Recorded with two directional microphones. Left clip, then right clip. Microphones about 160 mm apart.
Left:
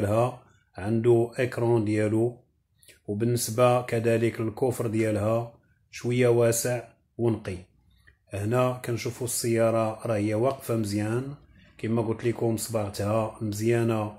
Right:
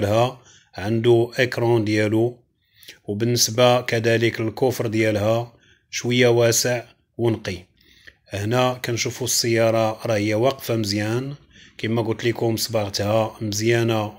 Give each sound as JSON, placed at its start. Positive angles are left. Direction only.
{"t": 0.0, "sound": "speech", "side_deg": -30}